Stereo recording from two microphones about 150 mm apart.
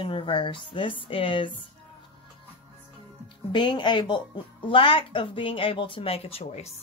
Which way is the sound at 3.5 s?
30° left (ahead or behind).